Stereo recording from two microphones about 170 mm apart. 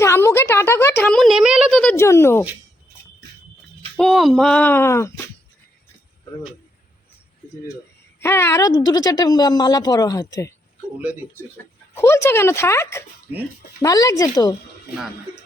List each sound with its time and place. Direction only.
0.0 s a sound: 15° left (ahead or behind)
1.1 s a sound: centre (ahead or behind); by 2.4 s 15° left (ahead or behind)
3.9 s speech: centre (ahead or behind); by 5.2 s 15° left (ahead or behind)
8.2 s a woman's voice: 15° left (ahead or behind)
11.0 s speech: 10° right (ahead or behind)
11.5 s a woman's voice: 15° left (ahead or behind)